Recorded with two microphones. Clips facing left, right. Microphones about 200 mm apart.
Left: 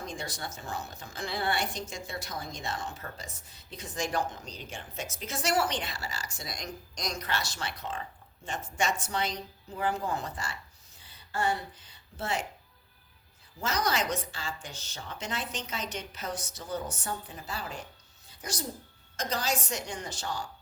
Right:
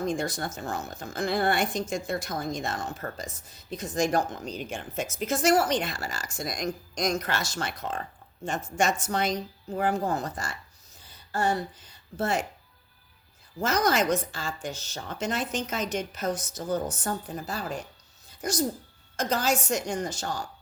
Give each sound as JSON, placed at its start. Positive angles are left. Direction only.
{"t": 0.1, "sound": "a woman's voice", "side_deg": -45}
{"t": 11.0, "sound": "a sound", "side_deg": -40}
{"t": 12.1, "sound": "a woman's voice", "side_deg": -45}
{"t": 13.6, "sound": "a woman's voice", "side_deg": -50}
{"t": 18.3, "sound": "a sound", "side_deg": -45}
{"t": 19.1, "sound": "a woman's voice", "side_deg": -50}